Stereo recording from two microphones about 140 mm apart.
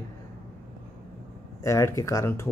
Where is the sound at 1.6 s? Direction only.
20° left (ahead or behind).